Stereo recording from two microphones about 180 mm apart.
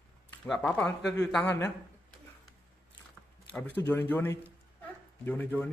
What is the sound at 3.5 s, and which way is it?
Speech, 10° left (ahead or behind).